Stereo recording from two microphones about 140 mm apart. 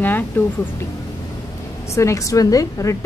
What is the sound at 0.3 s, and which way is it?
Speech, 15° left (ahead or behind).